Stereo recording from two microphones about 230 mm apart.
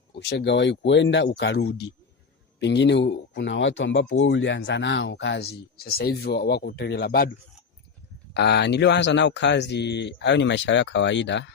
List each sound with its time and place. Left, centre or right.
0.2 s speech: left
8.3 s speech: left